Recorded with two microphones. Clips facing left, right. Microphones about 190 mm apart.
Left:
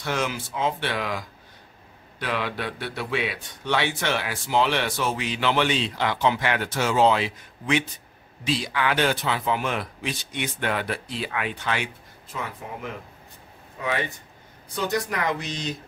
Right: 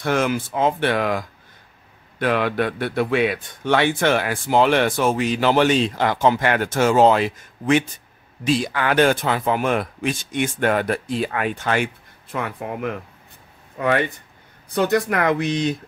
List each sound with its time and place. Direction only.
0.0 s speech: 50° right (ahead or behind)